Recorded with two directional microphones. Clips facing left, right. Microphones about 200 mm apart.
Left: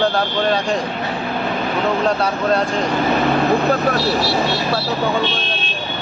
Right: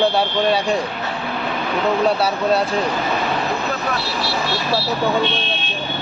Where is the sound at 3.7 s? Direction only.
45° left (ahead or behind).